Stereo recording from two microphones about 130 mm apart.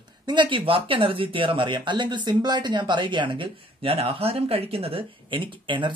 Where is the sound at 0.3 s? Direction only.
40° right (ahead or behind).